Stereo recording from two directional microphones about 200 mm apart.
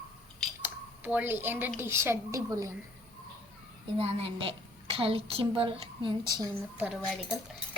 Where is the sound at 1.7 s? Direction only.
10° right (ahead or behind).